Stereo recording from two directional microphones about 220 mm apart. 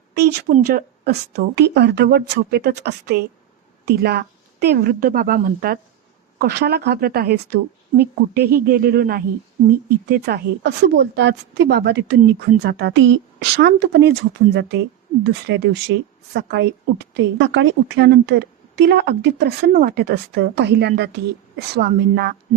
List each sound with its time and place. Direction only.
0.1 s a woman's voice: 45° right (ahead or behind)